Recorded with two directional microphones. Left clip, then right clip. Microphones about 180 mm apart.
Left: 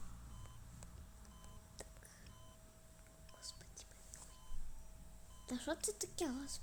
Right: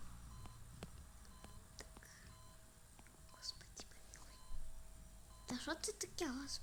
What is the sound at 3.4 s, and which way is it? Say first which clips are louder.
Whispering: right 4 dB; 10° left (ahead or behind).